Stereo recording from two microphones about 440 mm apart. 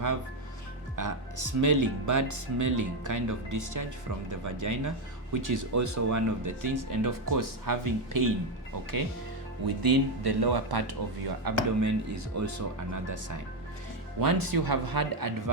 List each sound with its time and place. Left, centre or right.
0.9 s speech: right
9.6 s speech: right
11.4 s speech: right
14.2 s speech: right